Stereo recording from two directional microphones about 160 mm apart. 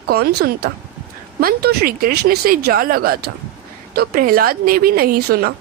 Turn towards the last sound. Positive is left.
turn(degrees=-80)